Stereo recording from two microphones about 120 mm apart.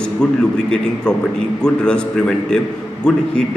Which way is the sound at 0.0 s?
5° left (ahead or behind).